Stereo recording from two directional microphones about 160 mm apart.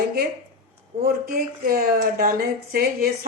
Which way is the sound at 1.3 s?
60° right (ahead or behind).